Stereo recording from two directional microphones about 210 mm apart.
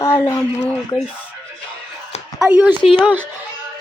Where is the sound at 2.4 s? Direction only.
5° right (ahead or behind).